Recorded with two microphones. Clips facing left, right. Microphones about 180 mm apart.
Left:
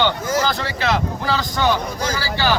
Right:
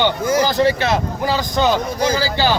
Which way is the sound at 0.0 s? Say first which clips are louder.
Right 3 dB; 20° right (ahead or behind).